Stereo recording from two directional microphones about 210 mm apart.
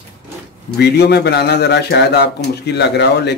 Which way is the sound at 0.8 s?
50° left (ahead or behind).